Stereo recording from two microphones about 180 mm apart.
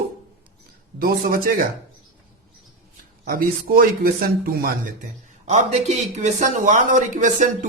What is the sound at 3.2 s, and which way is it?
Speech, 55° right (ahead or behind).